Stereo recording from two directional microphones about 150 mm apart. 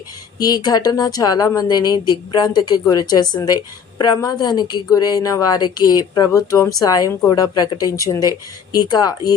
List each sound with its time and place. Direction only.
0.3 s a woman's voice: 25° left (ahead or behind)